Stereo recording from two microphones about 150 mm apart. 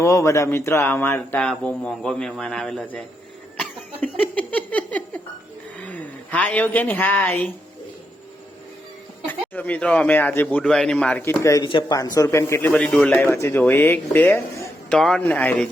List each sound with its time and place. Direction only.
0.0 s a man's voice: 20° left (ahead or behind); by 3.0 s 5° left (ahead or behind)
3.6 s a sound: 10° left (ahead or behind)
5.8 s a woman's voice: 10° left (ahead or behind)
9.2 s a man's voice: 10° left (ahead or behind)
14.8 s a man's voice: 5° left (ahead or behind)